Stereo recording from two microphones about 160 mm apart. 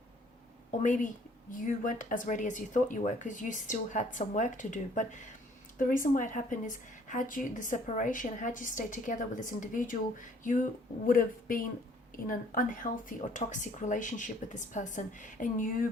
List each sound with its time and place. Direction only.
0.7 s a woman's voice: 55° left (ahead or behind)